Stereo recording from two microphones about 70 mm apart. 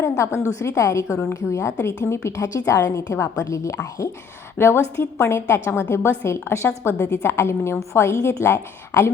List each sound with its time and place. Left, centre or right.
0.2 s a woman's voice: left
4.5 s a woman's voice: left